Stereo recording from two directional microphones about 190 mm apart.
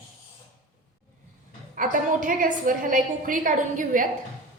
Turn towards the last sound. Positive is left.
turn(degrees=-45)  # may be behind; listen again after turning